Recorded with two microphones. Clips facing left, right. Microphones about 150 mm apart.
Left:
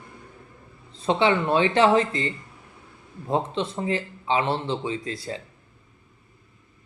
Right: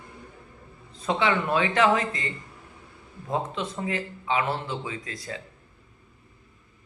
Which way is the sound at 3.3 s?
30° left (ahead or behind).